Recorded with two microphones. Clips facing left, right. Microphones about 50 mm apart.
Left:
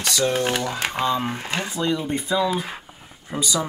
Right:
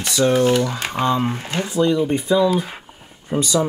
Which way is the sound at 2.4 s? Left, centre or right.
Left.